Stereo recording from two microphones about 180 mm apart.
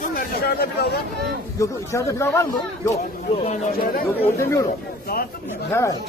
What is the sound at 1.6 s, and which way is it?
Speech, 15° left (ahead or behind).